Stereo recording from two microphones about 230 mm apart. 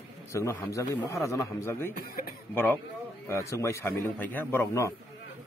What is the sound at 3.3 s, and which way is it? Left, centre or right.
Speech, centre.